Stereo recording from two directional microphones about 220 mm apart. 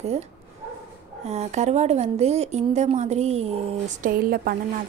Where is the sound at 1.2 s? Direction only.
30° right (ahead or behind).